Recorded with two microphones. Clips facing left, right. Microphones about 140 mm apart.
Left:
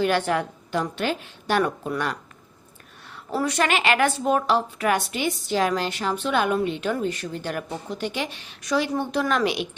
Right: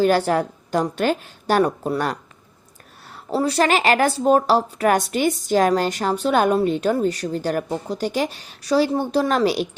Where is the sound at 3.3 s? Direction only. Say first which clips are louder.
Right 4 dB; 30° right (ahead or behind).